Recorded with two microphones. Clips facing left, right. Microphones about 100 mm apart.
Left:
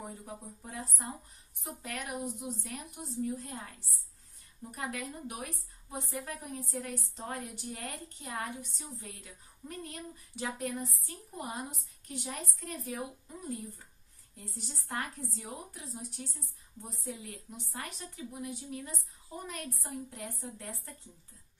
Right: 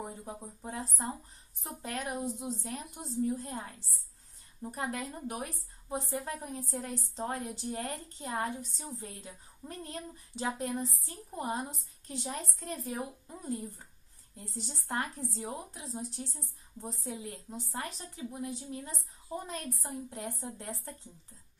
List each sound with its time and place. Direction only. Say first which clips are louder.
0.2 s a woman's voice: right 3 dB; 25° right (ahead or behind)
14.3 s a woman's voice: right 3 dB; 30° right (ahead or behind)